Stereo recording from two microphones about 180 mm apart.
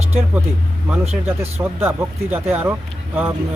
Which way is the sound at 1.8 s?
15° right (ahead or behind).